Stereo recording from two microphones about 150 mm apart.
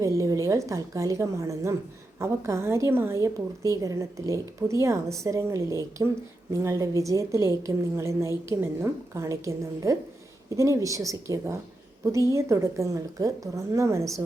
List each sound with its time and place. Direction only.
0.0 s a woman's voice: 20° right (ahead or behind)